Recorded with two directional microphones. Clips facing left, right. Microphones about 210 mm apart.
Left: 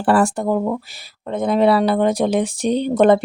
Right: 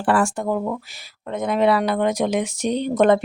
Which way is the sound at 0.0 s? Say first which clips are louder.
Left 3 dB; 35° left (ahead or behind).